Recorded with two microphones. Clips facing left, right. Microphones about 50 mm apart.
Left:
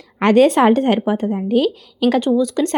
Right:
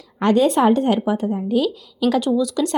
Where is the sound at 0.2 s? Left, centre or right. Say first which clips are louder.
Left 4 dB; left.